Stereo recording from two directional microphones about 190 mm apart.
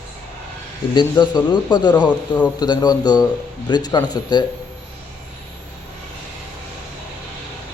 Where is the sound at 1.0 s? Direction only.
25° left (ahead or behind).